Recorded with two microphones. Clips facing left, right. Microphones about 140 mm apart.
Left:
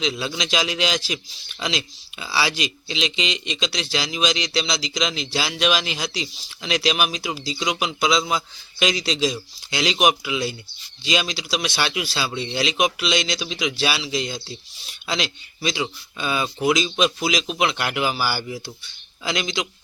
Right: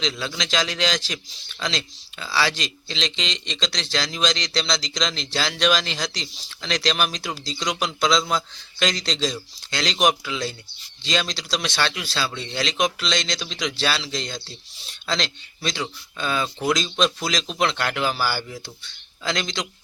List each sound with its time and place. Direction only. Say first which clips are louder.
0.0 s a man's voice: left 2 dB; 15° left (ahead or behind)